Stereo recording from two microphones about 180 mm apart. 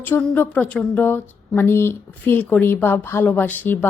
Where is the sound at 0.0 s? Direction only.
10° left (ahead or behind).